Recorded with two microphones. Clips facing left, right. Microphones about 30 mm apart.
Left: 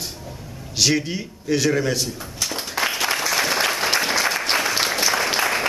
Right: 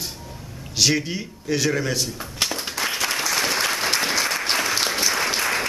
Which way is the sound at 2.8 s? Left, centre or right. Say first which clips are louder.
Left 3 dB; centre.